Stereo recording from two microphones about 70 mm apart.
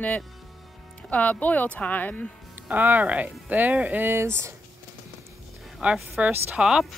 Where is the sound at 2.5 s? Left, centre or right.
Right.